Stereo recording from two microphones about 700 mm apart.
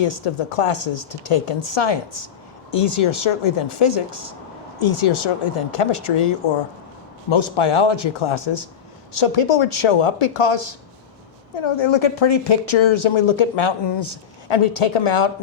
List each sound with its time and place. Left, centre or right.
0.0 s speech: left